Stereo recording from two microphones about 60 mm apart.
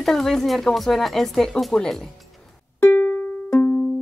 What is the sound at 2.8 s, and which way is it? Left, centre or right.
Music, left.